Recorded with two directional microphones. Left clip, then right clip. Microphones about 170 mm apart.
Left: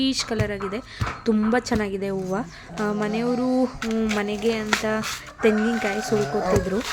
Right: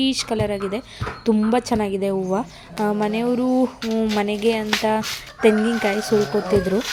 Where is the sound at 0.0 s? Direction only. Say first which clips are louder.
Right 3 dB; 20° right (ahead or behind).